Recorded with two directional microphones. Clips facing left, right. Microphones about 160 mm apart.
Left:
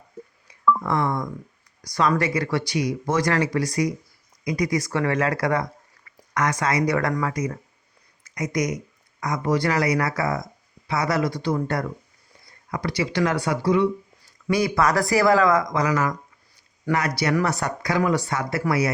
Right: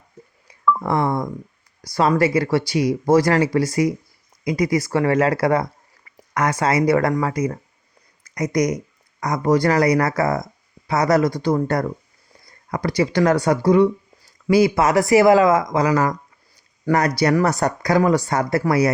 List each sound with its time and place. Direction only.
0.8 s speech: 30° right (ahead or behind); by 13.8 s 45° right (ahead or behind)
14.4 s speech: 25° right (ahead or behind)